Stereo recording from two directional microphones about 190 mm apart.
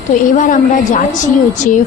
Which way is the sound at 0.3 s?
45° left (ahead or behind).